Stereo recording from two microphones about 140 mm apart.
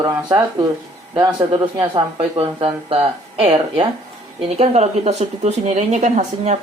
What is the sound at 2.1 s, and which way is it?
Speech, 40° right (ahead or behind).